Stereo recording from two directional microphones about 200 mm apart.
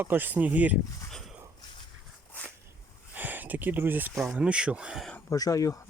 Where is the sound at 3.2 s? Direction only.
10° right (ahead or behind).